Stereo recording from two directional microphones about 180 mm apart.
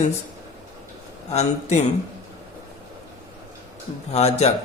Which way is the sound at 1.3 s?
35° left (ahead or behind).